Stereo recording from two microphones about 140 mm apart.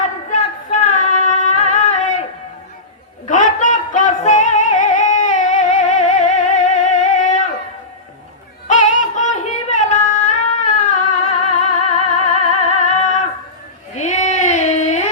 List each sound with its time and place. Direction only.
0.3 s female singing: 65° left (ahead or behind)
3.2 s singing: 65° left (ahead or behind)
8.6 s music: 65° left (ahead or behind)
13.9 s a sound: 55° left (ahead or behind)